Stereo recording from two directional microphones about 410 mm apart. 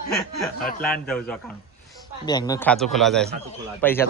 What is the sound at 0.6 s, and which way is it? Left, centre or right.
Speech, left.